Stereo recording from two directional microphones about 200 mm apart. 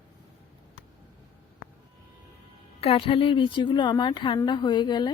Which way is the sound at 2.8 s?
30° left (ahead or behind).